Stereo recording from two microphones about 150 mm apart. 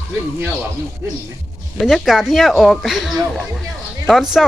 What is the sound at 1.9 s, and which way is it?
Speech, centre (ahead or behind).